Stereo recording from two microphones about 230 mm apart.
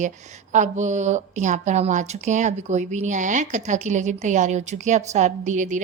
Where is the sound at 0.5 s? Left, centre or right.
Right.